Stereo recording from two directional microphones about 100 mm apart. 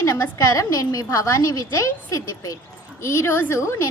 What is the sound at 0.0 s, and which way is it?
A woman's voice, 30° left (ahead or behind).